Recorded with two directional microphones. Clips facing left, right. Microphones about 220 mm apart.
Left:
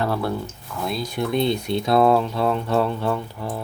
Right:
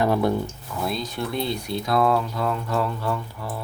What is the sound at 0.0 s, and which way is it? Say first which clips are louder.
Speech: right 3 dB; 15° right (ahead or behind).